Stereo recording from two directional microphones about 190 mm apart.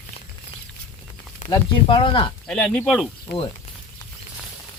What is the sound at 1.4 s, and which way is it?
Speech, 25° left (ahead or behind).